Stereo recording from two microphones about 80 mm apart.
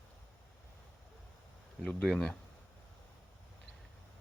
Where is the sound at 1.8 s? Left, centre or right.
Centre.